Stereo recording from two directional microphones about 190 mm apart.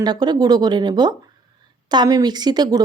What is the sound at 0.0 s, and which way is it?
A woman's voice, 20° right (ahead or behind).